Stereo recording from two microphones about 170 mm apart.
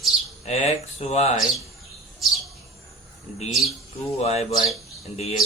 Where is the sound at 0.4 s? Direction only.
40° left (ahead or behind).